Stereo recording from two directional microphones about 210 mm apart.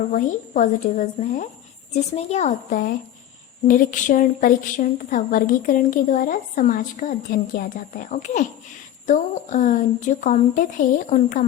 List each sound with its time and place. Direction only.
0.1 s a woman's voice: 40° left (ahead or behind)